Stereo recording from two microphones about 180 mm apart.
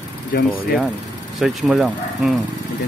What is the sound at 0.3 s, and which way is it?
Speech, 60° left (ahead or behind).